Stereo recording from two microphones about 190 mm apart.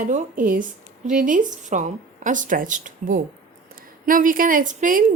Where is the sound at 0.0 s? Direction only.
40° right (ahead or behind).